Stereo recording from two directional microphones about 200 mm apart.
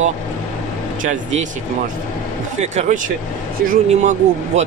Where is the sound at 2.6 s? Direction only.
35° right (ahead or behind).